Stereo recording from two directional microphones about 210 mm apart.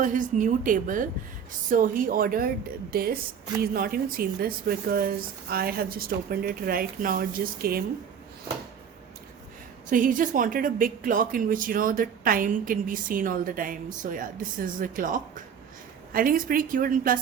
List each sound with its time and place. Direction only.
0.0 s a woman's voice: 40° right (ahead or behind)
9.9 s a woman's voice: 40° right (ahead or behind)